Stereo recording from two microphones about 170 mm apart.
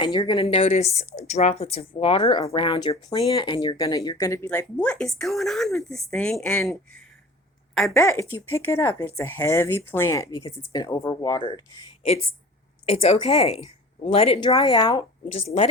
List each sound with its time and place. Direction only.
0.0 s speech: 25° left (ahead or behind); by 6.6 s 5° left (ahead or behind)
7.7 s speech: 5° left (ahead or behind); by 15.0 s 25° left (ahead or behind)